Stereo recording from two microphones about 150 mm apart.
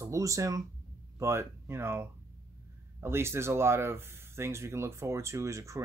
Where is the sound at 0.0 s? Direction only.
20° right (ahead or behind).